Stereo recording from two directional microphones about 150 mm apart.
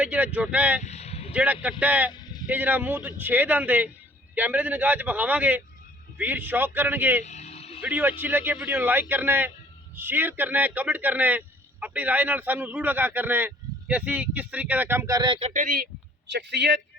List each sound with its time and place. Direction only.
0.0 s a man's voice: 10° right (ahead or behind)
0.8 s vehicle: 45° left (ahead or behind)
1.3 s a man's voice: 10° right (ahead or behind)
7.3 s vehicle: 45° left (ahead or behind)
7.8 s a man's voice: 10° right (ahead or behind); by 15.4 s 25° right (ahead or behind)
15.4 s speech: 50° right (ahead or behind); by 15.9 s 70° right (ahead or behind)
16.5 s a man's voice: 90° right